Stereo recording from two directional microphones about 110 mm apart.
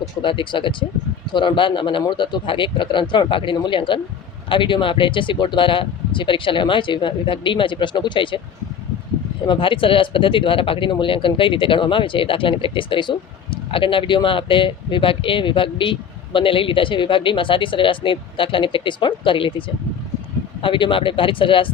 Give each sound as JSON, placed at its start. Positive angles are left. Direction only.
{"t": 0.2, "sound": "speech", "side_deg": 50}
{"t": 9.5, "sound": "speech", "side_deg": 50}